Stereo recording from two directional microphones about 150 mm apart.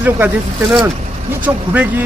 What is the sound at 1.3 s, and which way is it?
Speech, 10° right (ahead or behind).